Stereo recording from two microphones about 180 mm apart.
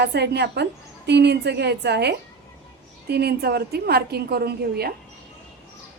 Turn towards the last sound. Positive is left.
turn(degrees=-60)  # may be behind; listen again after turning